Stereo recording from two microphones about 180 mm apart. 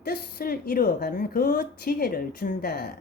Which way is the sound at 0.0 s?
60° left (ahead or behind).